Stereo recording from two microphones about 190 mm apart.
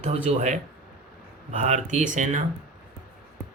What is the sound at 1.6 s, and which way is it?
Speech, 40° right (ahead or behind).